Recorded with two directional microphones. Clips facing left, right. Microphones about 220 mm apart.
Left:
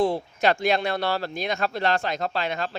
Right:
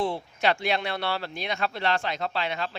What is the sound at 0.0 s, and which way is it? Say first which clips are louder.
Speech: left 4 dB; 40° left (ahead or behind).